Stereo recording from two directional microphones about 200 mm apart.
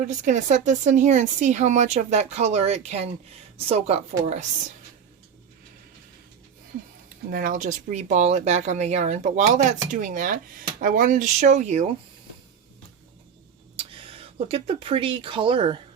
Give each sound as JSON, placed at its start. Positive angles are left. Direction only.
{"t": 0.1, "sound": "speech", "side_deg": -40}
{"t": 7.3, "sound": "speech", "side_deg": -45}
{"t": 13.7, "sound": "speech", "side_deg": -30}